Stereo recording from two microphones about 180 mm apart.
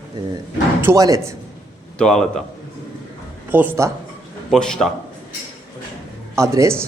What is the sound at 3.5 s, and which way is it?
Speech, 10° right (ahead or behind).